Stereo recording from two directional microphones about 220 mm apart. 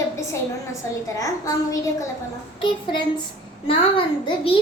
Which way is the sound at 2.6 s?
20° left (ahead or behind).